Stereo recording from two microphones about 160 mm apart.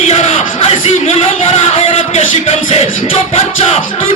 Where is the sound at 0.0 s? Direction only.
40° left (ahead or behind).